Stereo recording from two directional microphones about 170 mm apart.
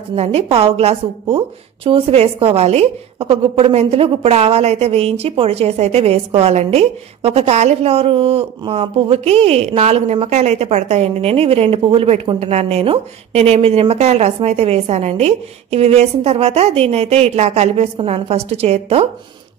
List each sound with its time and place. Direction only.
0.1 s a woman's voice: 40° right (ahead or behind)